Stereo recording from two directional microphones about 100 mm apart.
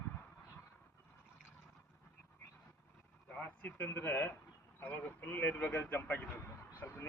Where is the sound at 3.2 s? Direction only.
15° left (ahead or behind).